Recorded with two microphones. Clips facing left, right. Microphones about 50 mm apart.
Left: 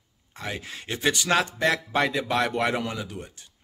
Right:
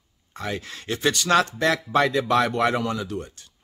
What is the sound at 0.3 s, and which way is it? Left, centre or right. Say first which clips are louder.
Speech: right 3 dB; centre.